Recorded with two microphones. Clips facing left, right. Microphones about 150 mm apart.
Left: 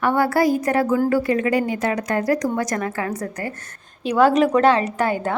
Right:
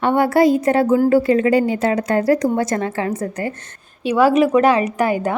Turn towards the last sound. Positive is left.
turn(degrees=-10)  # may be behind; listen again after turning